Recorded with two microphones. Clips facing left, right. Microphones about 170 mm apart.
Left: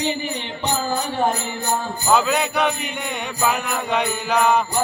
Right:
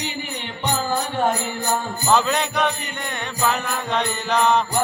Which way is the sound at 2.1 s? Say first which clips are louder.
Left 1 dB; 10° left (ahead or behind).